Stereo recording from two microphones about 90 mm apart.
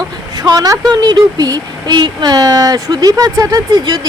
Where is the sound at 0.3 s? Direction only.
45° right (ahead or behind).